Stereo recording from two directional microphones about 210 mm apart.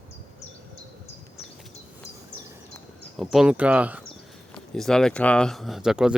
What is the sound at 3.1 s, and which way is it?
Speech, centre (ahead or behind).